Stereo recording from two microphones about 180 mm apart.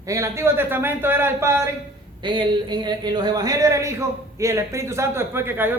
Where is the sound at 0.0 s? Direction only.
15° right (ahead or behind).